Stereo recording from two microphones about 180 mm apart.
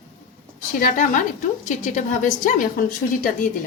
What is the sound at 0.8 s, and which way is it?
A woman's voice, 45° left (ahead or behind).